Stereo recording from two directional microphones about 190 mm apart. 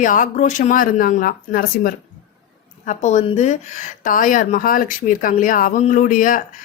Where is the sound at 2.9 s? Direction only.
40° left (ahead or behind).